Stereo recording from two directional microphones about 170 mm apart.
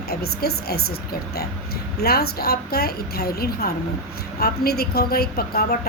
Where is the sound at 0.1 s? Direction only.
65° left (ahead or behind).